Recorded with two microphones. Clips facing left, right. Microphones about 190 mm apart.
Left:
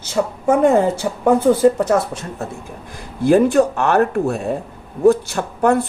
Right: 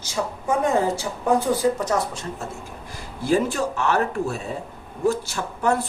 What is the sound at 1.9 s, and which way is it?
Speech, 60° left (ahead or behind).